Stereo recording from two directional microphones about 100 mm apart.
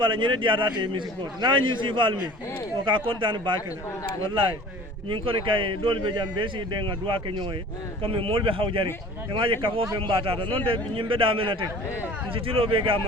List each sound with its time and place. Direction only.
0.0 s a man's voice: 55° right (ahead or behind)
5.0 s speech: 60° right (ahead or behind)
8.0 s speech: 65° right (ahead or behind)